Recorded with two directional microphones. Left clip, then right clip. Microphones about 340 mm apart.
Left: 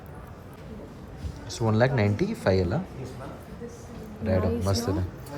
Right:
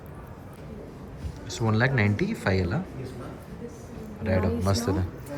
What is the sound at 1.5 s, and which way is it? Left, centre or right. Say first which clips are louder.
Speech: left 1 dB; centre.